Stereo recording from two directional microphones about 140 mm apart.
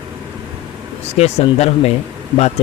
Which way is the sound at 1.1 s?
50° left (ahead or behind).